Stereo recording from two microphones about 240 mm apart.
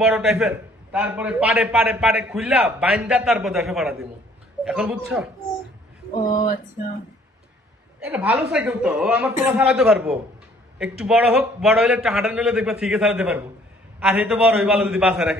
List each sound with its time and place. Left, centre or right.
0.0 s a man's voice: centre
6.3 s a sound: left
8.0 s a man's voice: centre